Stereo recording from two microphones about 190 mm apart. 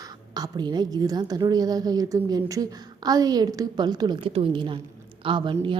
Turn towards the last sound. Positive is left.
turn(degrees=-25)  # may be behind; listen again after turning